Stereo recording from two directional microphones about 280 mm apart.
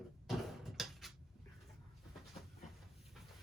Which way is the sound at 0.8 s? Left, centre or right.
Centre.